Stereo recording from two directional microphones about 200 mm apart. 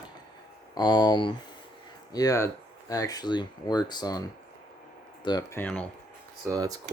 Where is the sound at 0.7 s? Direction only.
20° left (ahead or behind).